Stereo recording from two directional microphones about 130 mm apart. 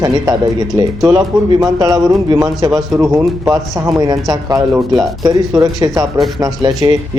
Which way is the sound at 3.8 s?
25° right (ahead or behind).